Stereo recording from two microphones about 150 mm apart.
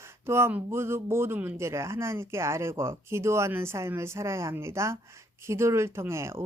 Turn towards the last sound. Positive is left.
turn(degrees=-20)  # may be behind; listen again after turning